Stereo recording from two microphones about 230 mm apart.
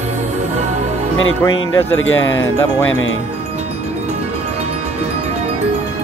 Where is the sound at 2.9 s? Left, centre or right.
Left.